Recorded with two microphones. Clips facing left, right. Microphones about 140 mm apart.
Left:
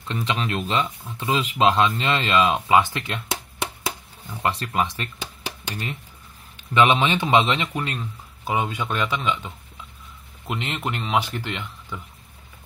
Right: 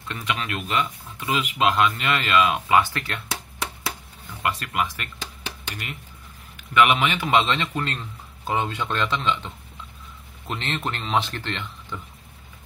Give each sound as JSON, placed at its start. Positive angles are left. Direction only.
{"t": 0.1, "sound": "speech", "side_deg": 30}
{"t": 4.4, "sound": "speech", "side_deg": 30}
{"t": 5.2, "sound": "a sound", "side_deg": 10}
{"t": 6.5, "sound": "a man's voice", "side_deg": 30}